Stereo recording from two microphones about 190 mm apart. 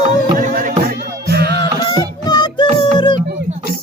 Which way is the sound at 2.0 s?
20° left (ahead or behind).